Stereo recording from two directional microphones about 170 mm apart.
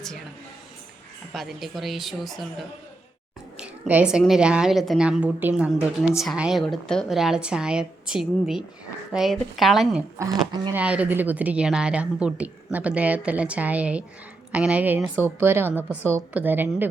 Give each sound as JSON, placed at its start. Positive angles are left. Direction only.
{"t": 1.3, "sound": "a woman's voice", "side_deg": 0}
{"t": 3.6, "sound": "a sound", "side_deg": -5}
{"t": 4.2, "sound": "a woman's voice", "side_deg": -5}
{"t": 10.2, "sound": "a woman's voice", "side_deg": -15}